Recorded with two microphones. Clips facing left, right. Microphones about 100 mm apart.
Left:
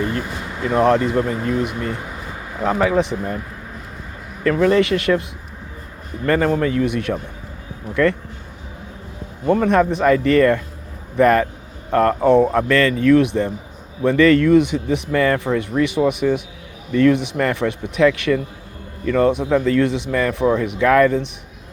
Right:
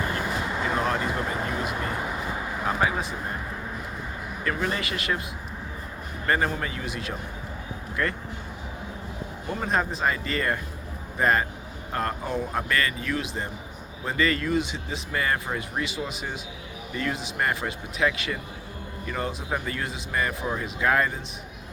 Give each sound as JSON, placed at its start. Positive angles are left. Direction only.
{"t": 0.0, "sound": "a sound", "side_deg": -20}
{"t": 0.8, "sound": "speech", "side_deg": 65}
{"t": 1.8, "sound": "speech", "side_deg": -20}
{"t": 2.6, "sound": "speech", "side_deg": 75}
{"t": 4.4, "sound": "speech", "side_deg": 85}
{"t": 6.2, "sound": "speech", "side_deg": 65}
{"t": 8.0, "sound": "speech", "side_deg": 85}
{"t": 9.5, "sound": "speech", "side_deg": 70}